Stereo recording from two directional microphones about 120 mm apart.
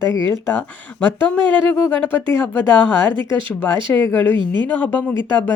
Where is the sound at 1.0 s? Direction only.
15° left (ahead or behind).